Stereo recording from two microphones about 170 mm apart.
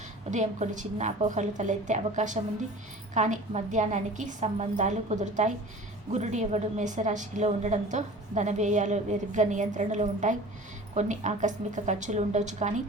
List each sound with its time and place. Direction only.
0.3 s a woman's voice: 45° right (ahead or behind)